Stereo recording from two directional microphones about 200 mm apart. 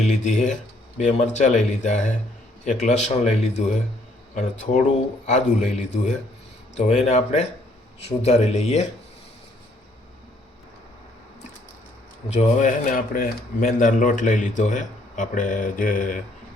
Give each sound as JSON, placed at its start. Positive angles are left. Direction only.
{"t": 0.1, "sound": "speech", "side_deg": 35}
{"t": 12.3, "sound": "speech", "side_deg": 35}